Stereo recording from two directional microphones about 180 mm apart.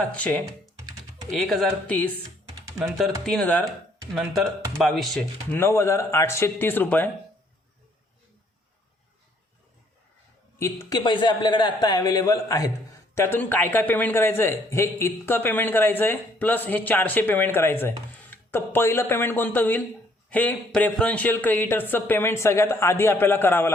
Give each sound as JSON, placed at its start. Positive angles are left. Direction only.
{"t": 0.2, "sound": "a man's voice", "side_deg": 5}
{"t": 0.8, "sound": "typing", "side_deg": -20}
{"t": 1.3, "sound": "speech", "side_deg": 0}
{"t": 3.2, "sound": "speech", "side_deg": 5}
{"t": 5.5, "sound": "a man's voice", "side_deg": 15}
{"t": 10.6, "sound": "a man's voice", "side_deg": 20}